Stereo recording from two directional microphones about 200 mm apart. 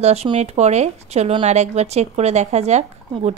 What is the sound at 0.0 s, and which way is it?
A woman's voice, 30° right (ahead or behind).